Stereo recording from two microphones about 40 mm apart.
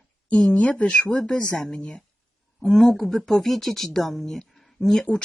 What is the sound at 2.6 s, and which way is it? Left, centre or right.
Speech, centre.